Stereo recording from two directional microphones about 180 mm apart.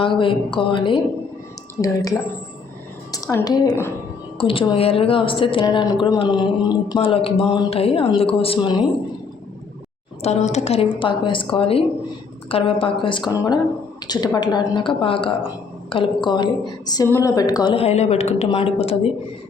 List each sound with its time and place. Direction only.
0.0 s a woman's voice: 30° left (ahead or behind)
4.4 s speech: 30° left (ahead or behind)
10.2 s a woman's voice: 40° left (ahead or behind)